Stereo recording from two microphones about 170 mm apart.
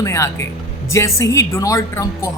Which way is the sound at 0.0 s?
15° left (ahead or behind).